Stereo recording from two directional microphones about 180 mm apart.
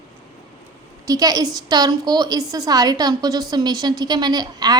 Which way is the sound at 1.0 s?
20° right (ahead or behind).